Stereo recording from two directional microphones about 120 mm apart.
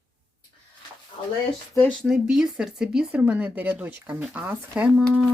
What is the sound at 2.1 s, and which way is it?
Speech, 5° right (ahead or behind).